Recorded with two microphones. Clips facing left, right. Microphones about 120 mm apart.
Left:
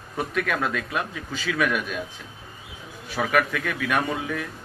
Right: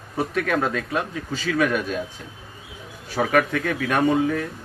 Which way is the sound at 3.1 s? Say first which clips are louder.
Right 3 dB; 35° right (ahead or behind).